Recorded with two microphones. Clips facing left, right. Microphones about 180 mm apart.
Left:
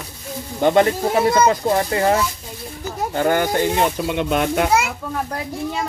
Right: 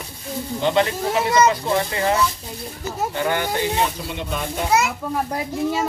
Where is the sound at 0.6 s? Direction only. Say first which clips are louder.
Left 5 dB; 50° left (ahead or behind).